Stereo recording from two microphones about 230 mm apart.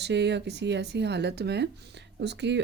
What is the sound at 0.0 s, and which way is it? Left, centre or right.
Speech, right.